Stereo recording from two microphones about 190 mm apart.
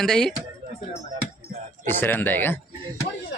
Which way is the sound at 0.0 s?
5° left (ahead or behind).